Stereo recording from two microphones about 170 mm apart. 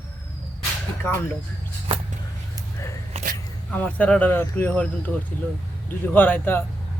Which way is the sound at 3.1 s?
35° right (ahead or behind).